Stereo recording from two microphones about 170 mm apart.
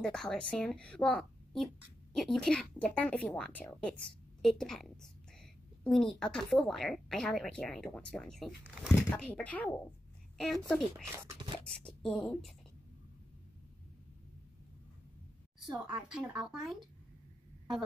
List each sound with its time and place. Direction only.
0.0 s speech: 5° left (ahead or behind)
11.1 s speech: 15° right (ahead or behind)
11.8 s speech: 5° left (ahead or behind)
15.9 s speech: 5° right (ahead or behind)